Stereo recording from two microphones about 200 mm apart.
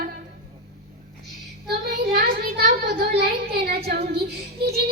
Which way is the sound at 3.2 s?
50° right (ahead or behind).